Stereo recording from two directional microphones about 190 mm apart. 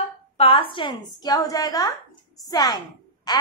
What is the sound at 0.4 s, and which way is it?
A woman's voice, 30° left (ahead or behind).